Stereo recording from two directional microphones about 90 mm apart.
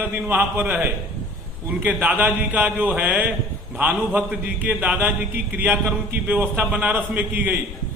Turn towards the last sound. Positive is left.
turn(degrees=-20)  # may be behind; listen again after turning